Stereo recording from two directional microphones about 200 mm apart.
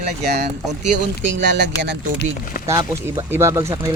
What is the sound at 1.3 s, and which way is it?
Speech, 60° right (ahead or behind).